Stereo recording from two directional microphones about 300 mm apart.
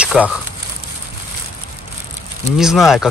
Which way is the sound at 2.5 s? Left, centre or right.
Centre.